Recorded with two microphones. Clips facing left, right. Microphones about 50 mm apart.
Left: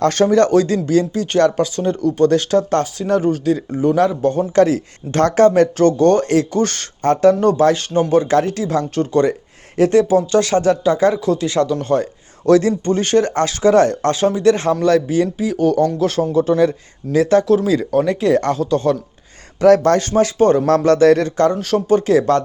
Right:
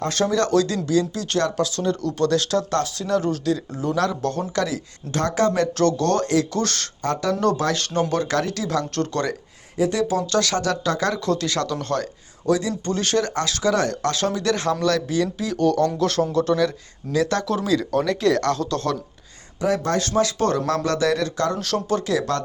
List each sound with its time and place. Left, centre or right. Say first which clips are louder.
0.1 s speech: left 7 dB; left
4.5 s speech: left 11 dB; left
5.7 s speech: left 7 dB; left
7.0 s speech: left 9 dB; left
9.0 s speech: left 12 dB; centre
9.9 s speech: left 10 dB; left; by 12.0 s centre
12.5 s speech: left 9 dB; left
12.8 s speech: left 7 dB; left
16.6 s speech: left 7 dB; left
19.6 s speech: left 10 dB; left
20.1 s speech: left 7 dB; left
21.5 s speech: left 7 dB; left